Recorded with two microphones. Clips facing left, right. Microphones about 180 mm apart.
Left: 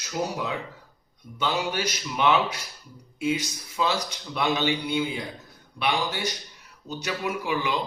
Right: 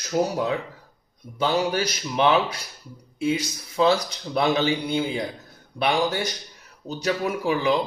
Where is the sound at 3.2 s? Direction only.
30° right (ahead or behind).